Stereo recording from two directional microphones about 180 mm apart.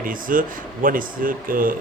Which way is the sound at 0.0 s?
50° right (ahead or behind).